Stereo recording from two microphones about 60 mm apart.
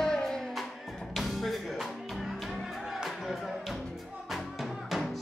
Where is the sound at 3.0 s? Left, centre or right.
Centre.